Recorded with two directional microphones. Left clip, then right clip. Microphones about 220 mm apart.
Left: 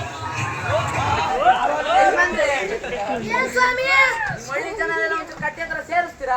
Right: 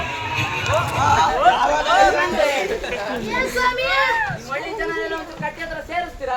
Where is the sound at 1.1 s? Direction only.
35° right (ahead or behind).